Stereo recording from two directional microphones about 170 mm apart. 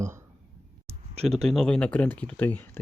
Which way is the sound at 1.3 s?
Centre (ahead or behind).